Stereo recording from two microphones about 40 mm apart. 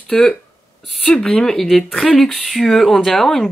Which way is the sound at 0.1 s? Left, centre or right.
Centre.